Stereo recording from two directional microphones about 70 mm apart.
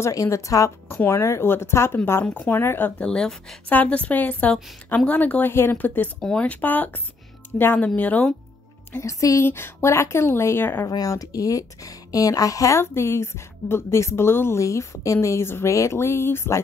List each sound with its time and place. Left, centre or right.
0.1 s a woman's voice: left
0.8 s a woman's voice: left
2.2 s a woman's voice: left
2.6 s a woman's voice: left
3.0 s speech: centre
3.6 s a woman's voice: left
6.2 s a woman's voice: centre
9.0 s a woman's voice: left
9.4 s a woman's voice: left
11.1 s a woman's voice: left
12.8 s a woman's voice: left
14.6 s a woman's voice: left
15.2 s a woman's voice: left